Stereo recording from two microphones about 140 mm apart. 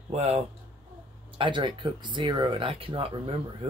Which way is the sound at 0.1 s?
50° right (ahead or behind).